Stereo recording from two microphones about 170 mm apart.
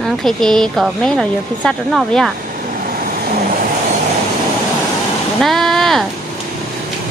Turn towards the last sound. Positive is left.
turn(degrees=0)  # may be behind; listen again after turning